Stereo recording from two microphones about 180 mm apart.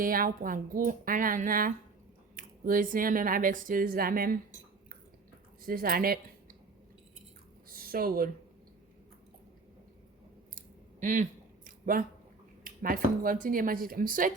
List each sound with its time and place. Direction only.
0.0 s speech: 50° right (ahead or behind)
5.6 s speech: 55° right (ahead or behind)
7.8 s speech: 55° right (ahead or behind)
11.0 s a sound: 45° right (ahead or behind)
12.6 s speech: 50° right (ahead or behind)